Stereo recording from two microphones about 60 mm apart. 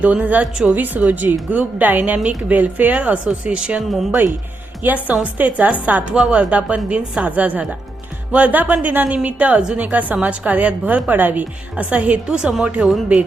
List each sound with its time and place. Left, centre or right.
0.0 s a woman's voice: right
4.8 s a woman's voice: right
6.1 s a woman's voice: centre